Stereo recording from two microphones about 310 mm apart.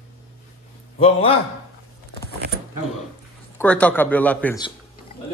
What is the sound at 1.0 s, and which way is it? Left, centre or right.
Speech, centre.